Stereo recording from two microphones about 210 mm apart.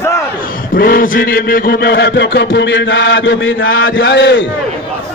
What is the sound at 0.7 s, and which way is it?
A man's voice, 45° left (ahead or behind).